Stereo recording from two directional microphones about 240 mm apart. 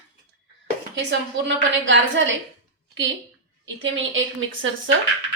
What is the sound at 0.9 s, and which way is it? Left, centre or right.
A woman's voice, right.